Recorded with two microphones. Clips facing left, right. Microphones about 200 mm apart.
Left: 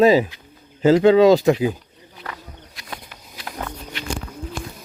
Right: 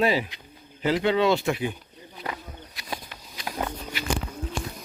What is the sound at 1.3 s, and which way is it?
Speech, 40° left (ahead or behind).